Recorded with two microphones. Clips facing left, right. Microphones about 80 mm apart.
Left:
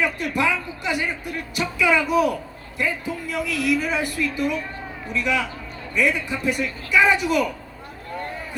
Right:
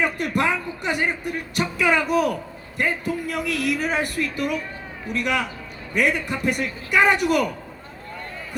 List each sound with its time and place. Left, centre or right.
0.0 s speech: right